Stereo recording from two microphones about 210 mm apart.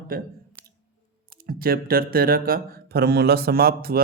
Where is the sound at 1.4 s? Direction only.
45° right (ahead or behind).